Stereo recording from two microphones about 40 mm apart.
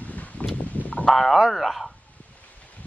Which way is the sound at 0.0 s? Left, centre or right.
Left.